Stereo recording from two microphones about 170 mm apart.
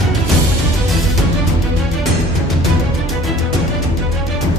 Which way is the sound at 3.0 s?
Centre (ahead or behind).